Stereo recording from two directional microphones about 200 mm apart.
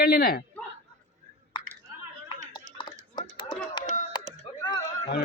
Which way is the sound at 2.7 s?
20° left (ahead or behind).